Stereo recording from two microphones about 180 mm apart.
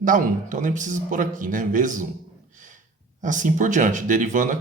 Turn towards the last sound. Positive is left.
turn(degrees=-45)  # may be behind; listen again after turning